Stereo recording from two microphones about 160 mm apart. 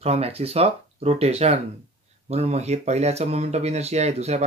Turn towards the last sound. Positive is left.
turn(degrees=-40)  # may be behind; listen again after turning